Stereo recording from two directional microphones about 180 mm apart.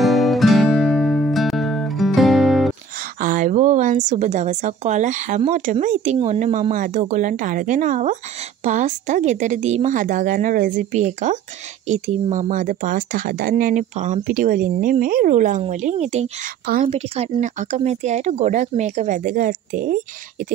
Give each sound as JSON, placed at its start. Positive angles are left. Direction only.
{"t": 0.0, "sound": "music", "side_deg": 0}
{"t": 3.2, "sound": "a woman's voice", "side_deg": -50}